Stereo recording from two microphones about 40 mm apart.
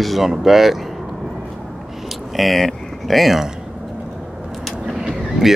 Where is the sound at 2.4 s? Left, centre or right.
Centre.